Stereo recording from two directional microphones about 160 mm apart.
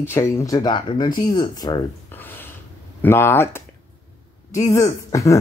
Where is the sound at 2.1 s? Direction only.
10° left (ahead or behind).